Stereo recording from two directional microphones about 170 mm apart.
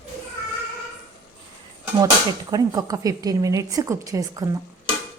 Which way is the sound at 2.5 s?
20° right (ahead or behind).